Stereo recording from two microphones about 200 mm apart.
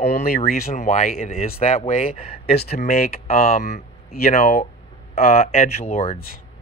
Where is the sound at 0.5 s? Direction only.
35° left (ahead or behind).